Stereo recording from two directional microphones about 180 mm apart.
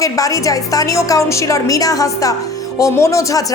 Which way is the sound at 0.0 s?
20° left (ahead or behind).